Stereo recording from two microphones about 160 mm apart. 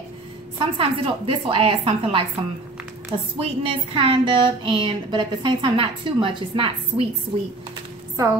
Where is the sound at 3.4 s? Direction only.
35° right (ahead or behind).